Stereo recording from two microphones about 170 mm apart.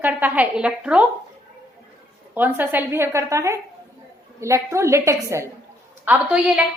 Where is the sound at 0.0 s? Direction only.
10° right (ahead or behind).